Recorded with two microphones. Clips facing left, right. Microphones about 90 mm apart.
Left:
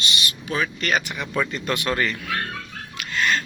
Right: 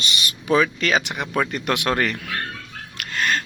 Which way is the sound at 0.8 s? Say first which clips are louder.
Right 2 dB; 90° right.